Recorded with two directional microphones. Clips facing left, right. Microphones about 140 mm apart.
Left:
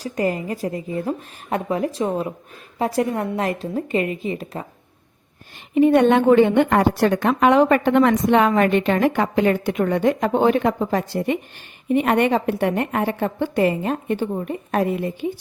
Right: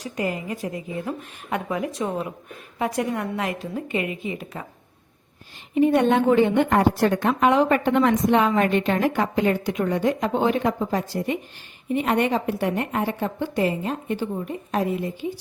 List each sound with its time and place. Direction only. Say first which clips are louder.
0.0 s a woman's voice: left 5 dB; 35° left (ahead or behind)
5.7 s a woman's voice: left 4 dB; 70° left (ahead or behind)